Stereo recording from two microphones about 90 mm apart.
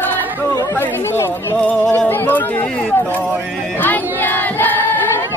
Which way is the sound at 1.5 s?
15° left (ahead or behind).